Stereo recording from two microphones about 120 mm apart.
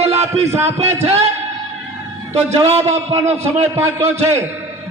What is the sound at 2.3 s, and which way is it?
A man's voice, 60° right (ahead or behind).